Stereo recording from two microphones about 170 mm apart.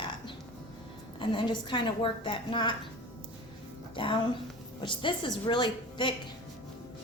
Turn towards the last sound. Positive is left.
turn(degrees=30)  # may be behind; listen again after turning